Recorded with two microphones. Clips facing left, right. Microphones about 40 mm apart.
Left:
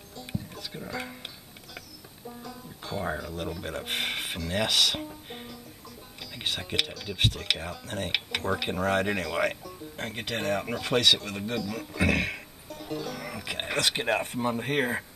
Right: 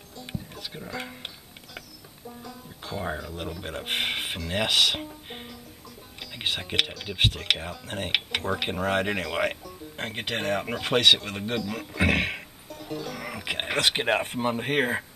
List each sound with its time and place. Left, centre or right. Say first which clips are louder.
0.7 s speech: even; centre
2.2 s music: even; centre
3.6 s speech: even; centre
3.9 s speech: right 4 dB; right
6.3 s music: right 3 dB; right
6.8 s speech: right 6 dB; centre
7.1 s speech: right 3 dB; right
9.9 s speech: right 2 dB; right
10.4 s speech: even; centre
10.8 s speech: right 4 dB; right
12.6 s music: left 1 dB; centre
13.4 s speech: right 3 dB; right